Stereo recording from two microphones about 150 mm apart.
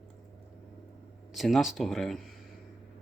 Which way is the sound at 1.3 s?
Centre (ahead or behind).